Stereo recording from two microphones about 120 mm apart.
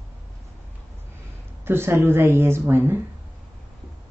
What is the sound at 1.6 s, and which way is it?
Speech, 20° right (ahead or behind).